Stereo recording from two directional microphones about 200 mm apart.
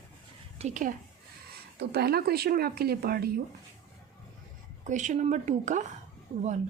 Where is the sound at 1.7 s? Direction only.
50° right (ahead or behind).